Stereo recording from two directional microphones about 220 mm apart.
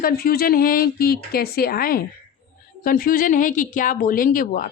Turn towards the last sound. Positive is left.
turn(degrees=40)  # may be behind; listen again after turning